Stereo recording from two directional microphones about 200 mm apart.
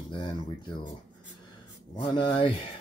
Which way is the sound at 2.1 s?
25° left (ahead or behind).